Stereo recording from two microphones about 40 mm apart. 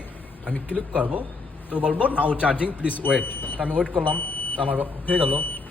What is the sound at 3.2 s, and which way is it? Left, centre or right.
Speech, left.